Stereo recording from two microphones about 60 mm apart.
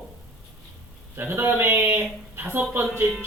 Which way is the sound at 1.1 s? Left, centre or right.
Right.